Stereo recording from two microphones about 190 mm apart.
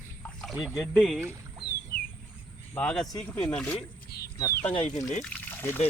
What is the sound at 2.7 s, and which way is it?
Speech, 5° left (ahead or behind).